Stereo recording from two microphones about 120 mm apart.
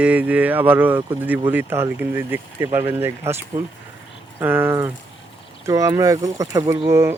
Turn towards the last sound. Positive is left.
turn(degrees=-25)  # may be behind; listen again after turning